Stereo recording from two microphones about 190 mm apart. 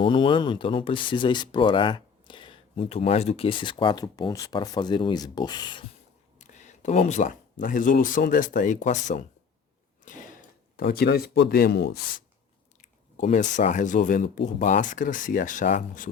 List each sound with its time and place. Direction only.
0.0 s speech: 25° left (ahead or behind)
6.4 s a sound: 40° left (ahead or behind)
7.6 s speech: 45° left (ahead or behind)
13.2 s speech: 40° left (ahead or behind)